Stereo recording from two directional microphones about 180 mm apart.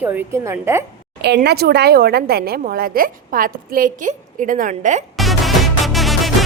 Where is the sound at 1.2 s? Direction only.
65° right (ahead or behind); by 5.0 s 45° right (ahead or behind).